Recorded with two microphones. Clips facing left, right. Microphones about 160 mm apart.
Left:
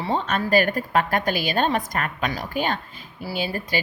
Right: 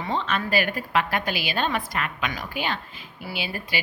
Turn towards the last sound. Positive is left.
turn(degrees=40)  # may be behind; listen again after turning